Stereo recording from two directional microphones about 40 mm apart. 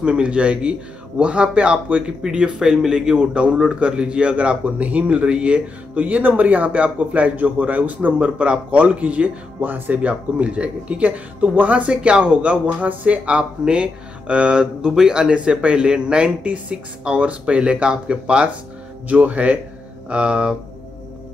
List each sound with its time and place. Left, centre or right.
0.0 s speech: right
2.2 s a man's voice: right
5.9 s speech: right
8.2 s speech: right
9.6 s speech: right
10.0 s speech: right
19.0 s speech: right